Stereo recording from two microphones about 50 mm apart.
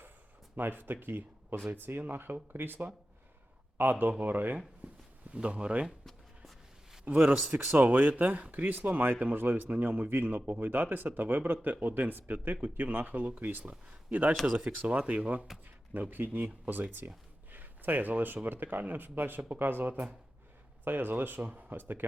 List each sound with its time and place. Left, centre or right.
0.8 s speech: right
5.3 s speech: right
6.1 s a sound: centre
7.0 s speech: right
7.6 s speech: right
7.9 s speech: right
15.9 s speech: right
17.5 s a sound: right
18.4 s speech: right